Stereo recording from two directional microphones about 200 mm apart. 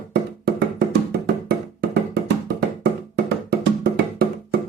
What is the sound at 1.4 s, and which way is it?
Music, 55° right (ahead or behind).